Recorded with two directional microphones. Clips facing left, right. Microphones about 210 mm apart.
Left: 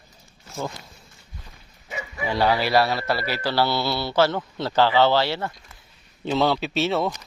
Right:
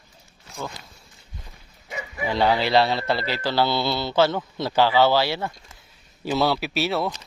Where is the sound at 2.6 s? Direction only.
20° right (ahead or behind).